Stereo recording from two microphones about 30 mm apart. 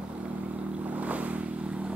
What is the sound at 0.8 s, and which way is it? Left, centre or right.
Vehicle, right.